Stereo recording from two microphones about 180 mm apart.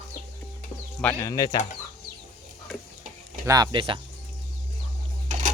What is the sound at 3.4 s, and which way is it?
Speech, 20° right (ahead or behind).